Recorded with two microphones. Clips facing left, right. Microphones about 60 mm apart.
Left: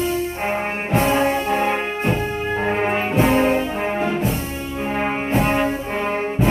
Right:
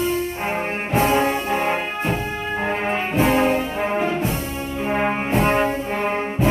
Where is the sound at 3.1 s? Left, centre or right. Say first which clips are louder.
Left 1 dB; centre.